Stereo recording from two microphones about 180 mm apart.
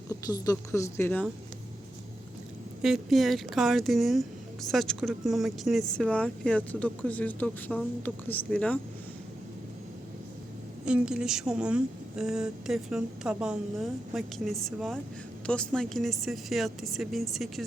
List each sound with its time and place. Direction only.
0.1 s speech: 20° left (ahead or behind)
2.8 s speech: centre (ahead or behind)
10.8 s speech: 5° right (ahead or behind)